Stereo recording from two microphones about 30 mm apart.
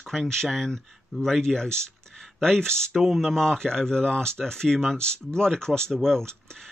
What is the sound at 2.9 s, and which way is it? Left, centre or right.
Speech, centre.